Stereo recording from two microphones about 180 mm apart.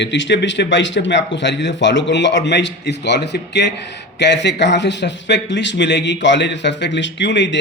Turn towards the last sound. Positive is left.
turn(degrees=80)